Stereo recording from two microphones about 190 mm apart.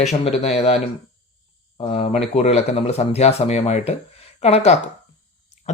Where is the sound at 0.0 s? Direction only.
35° left (ahead or behind).